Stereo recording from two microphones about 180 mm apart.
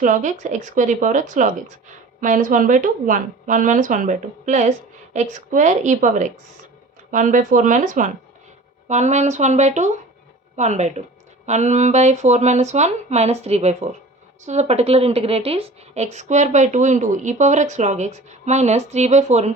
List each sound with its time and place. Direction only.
0.0 s a woman's voice: 45° right (ahead or behind)